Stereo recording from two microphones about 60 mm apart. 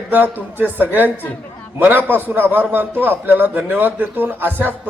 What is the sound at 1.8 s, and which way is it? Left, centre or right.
A man's voice, right.